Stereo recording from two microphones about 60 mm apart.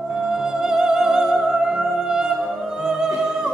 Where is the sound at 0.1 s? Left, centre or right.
Centre.